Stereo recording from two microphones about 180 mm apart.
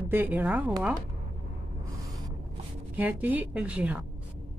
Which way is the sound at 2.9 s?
10° right (ahead or behind).